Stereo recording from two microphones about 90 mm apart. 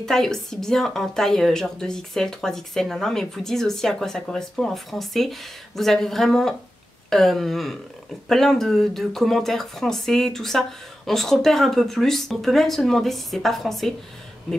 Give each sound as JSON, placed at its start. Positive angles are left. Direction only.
{"t": 0.0, "sound": "a woman's voice", "side_deg": 5}